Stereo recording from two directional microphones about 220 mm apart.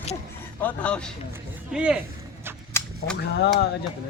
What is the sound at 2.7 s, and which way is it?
Cap gun, 10° left (ahead or behind).